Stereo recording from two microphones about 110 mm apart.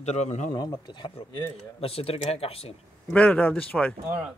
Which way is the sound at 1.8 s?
60° left (ahead or behind).